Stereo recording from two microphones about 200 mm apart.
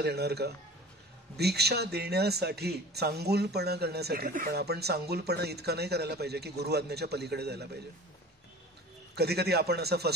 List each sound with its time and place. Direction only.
0.0 s speech: 55° right (ahead or behind)
9.1 s speech: 55° right (ahead or behind)